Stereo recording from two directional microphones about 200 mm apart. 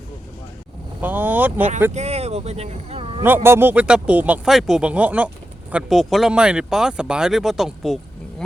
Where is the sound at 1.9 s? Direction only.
30° right (ahead or behind).